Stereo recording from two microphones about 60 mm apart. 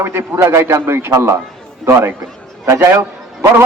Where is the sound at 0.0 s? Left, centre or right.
Right.